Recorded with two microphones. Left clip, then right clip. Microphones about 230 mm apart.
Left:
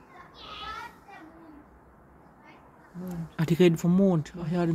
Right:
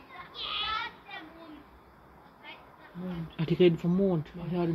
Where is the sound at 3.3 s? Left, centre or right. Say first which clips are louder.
Left 1 dB; left.